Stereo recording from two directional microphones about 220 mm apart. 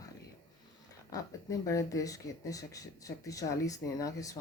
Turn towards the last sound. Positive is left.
turn(degrees=15)  # may be behind; listen again after turning